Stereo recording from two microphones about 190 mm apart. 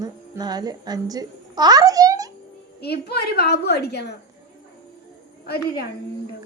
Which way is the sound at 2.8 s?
55° left (ahead or behind).